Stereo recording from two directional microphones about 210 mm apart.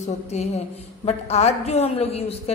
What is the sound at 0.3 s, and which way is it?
A woman's voice, 30° left (ahead or behind).